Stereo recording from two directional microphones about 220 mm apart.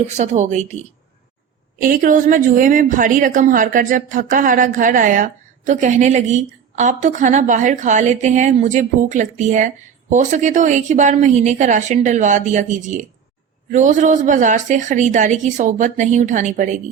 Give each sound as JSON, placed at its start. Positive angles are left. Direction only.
{"t": 0.2, "sound": "speech", "side_deg": -30}
{"t": 1.8, "sound": "speech", "side_deg": -40}